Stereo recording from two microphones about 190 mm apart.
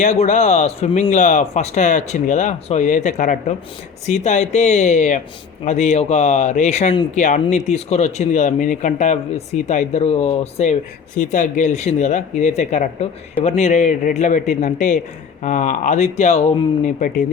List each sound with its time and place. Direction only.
0.0 s speech: 40° left (ahead or behind)